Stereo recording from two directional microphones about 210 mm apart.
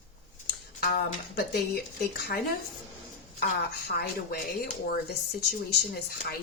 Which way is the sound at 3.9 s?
45° left (ahead or behind).